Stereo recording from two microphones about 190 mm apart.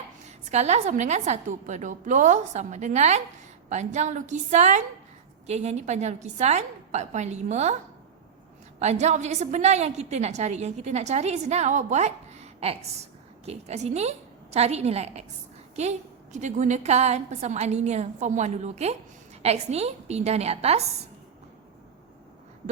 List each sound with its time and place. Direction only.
0.3 s a woman's voice: 35° right (ahead or behind)
8.8 s a woman's voice: 35° right (ahead or behind)